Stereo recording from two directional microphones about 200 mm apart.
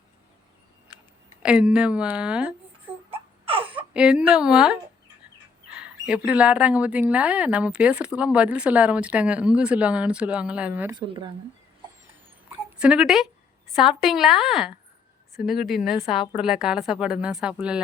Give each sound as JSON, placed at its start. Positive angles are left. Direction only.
{"t": 1.4, "sound": "speech", "side_deg": -5}
{"t": 3.1, "sound": "a sound", "side_deg": -30}
{"t": 3.9, "sound": "speech", "side_deg": -5}
{"t": 10.9, "sound": "speech", "side_deg": -25}
{"t": 12.5, "sound": "a sound", "side_deg": -5}
{"t": 13.7, "sound": "speech", "side_deg": 0}